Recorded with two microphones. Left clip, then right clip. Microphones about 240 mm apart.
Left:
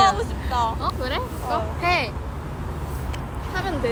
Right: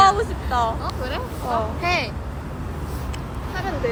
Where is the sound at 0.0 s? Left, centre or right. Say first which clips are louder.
Right 3 dB; right.